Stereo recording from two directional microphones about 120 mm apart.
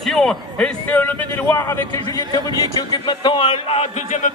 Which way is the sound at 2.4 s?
35° left (ahead or behind).